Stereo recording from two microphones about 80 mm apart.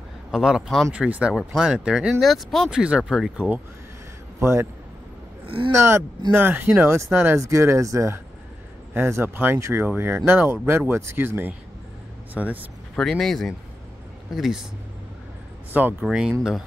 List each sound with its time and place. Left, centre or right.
0.3 s speech: centre
2.7 s speech: centre
4.4 s speech: right
5.7 s speech: right
8.9 s speech: right
12.9 s speech: centre
16.0 s speech: centre